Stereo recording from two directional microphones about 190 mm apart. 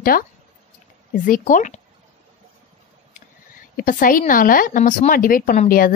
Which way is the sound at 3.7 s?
45° left (ahead or behind).